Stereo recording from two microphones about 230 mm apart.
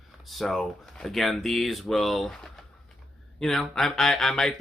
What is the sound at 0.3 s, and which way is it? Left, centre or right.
Speech, centre.